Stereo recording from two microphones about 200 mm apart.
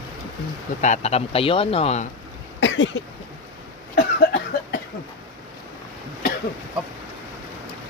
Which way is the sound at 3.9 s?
55° left (ahead or behind).